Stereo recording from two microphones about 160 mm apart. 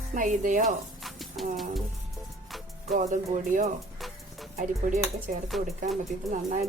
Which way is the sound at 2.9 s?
50° right (ahead or behind).